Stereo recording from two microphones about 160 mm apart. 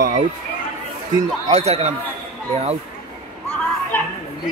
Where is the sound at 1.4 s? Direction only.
40° right (ahead or behind).